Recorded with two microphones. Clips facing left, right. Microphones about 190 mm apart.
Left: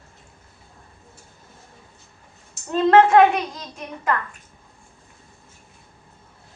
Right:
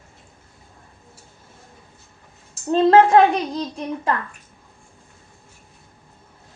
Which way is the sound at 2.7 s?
30° right (ahead or behind).